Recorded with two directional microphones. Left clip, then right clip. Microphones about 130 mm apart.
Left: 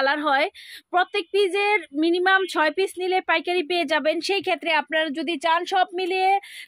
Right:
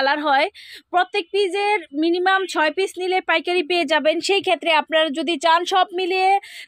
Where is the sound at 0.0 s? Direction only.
25° right (ahead or behind).